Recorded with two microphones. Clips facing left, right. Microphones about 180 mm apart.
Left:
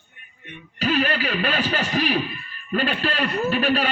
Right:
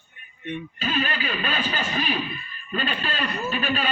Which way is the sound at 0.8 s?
75° left (ahead or behind).